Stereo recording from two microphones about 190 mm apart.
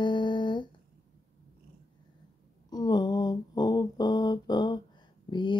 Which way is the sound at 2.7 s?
20° left (ahead or behind).